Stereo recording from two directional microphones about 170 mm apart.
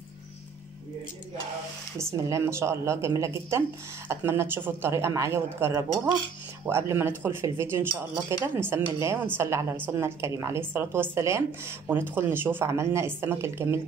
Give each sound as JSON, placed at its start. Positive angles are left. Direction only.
{"t": 2.2, "sound": "a woman's voice", "side_deg": -15}